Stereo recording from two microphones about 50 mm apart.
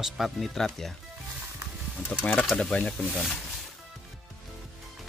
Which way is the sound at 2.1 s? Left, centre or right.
Left.